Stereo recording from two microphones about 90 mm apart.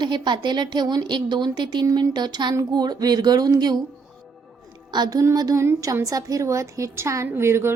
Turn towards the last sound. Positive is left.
turn(degrees=-30)  # may be behind; listen again after turning